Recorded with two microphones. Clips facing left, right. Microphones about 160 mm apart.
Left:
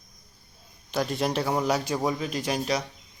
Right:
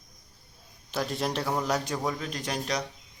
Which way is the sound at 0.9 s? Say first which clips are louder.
Left 3 dB; centre (ahead or behind).